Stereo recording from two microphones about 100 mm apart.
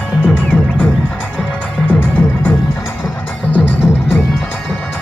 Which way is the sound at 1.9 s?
20° left (ahead or behind).